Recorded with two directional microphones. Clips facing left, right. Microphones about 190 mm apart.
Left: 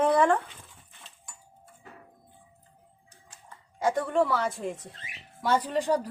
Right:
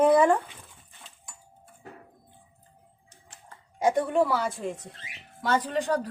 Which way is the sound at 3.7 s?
15° right (ahead or behind).